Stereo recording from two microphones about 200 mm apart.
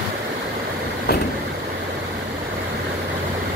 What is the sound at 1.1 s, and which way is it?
Vehicle, 50° left (ahead or behind).